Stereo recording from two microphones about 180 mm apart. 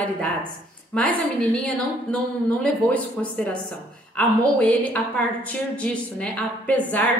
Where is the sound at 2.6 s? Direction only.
5° left (ahead or behind).